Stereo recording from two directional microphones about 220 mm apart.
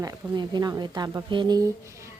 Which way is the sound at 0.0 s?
15° right (ahead or behind).